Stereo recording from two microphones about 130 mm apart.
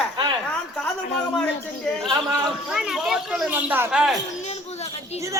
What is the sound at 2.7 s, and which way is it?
Speech, 5° right (ahead or behind).